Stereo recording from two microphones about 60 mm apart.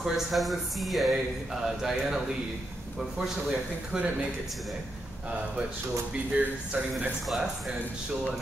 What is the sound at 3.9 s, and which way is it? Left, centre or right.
Speech, centre.